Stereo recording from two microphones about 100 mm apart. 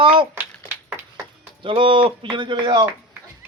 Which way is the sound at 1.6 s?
60° right (ahead or behind).